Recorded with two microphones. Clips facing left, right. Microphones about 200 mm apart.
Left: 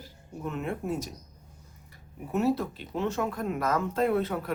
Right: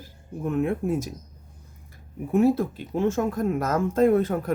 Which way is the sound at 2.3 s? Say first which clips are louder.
Right 6 dB; 50° right (ahead or behind).